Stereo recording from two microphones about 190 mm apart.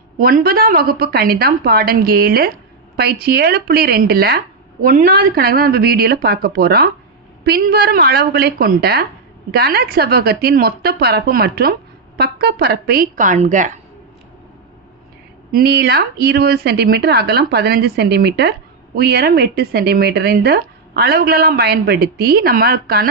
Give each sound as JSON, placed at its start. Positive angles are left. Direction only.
{"t": 0.2, "sound": "a woman's voice", "side_deg": -50}
{"t": 15.5, "sound": "speech", "side_deg": -55}